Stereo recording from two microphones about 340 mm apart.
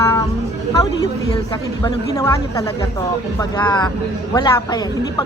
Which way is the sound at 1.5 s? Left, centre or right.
Centre.